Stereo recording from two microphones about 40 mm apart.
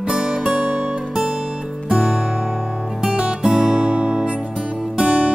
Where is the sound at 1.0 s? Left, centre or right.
Centre.